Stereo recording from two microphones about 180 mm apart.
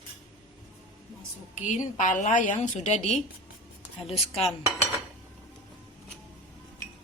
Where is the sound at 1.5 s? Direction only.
40° left (ahead or behind).